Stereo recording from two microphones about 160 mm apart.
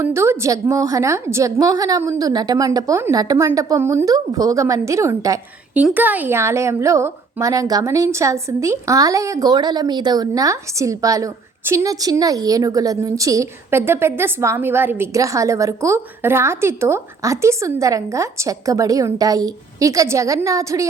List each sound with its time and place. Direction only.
0.0 s a woman's voice: 15° right (ahead or behind)